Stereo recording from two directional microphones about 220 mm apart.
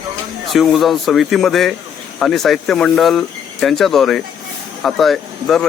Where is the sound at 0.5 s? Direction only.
Centre (ahead or behind).